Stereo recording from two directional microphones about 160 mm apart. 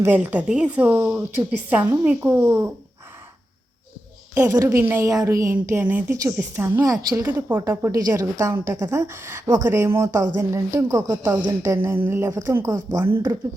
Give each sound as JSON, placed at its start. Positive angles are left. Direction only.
{"t": 0.0, "sound": "a woman's voice", "side_deg": -10}
{"t": 4.4, "sound": "a woman's voice", "side_deg": -20}